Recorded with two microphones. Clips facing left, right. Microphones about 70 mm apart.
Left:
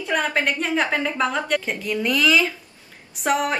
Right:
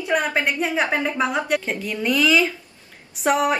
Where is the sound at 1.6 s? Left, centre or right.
Centre.